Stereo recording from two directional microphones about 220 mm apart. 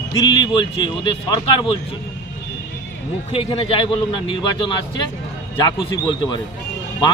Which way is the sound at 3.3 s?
25° left (ahead or behind).